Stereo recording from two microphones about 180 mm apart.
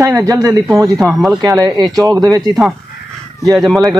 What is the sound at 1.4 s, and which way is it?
Speech, 20° right (ahead or behind).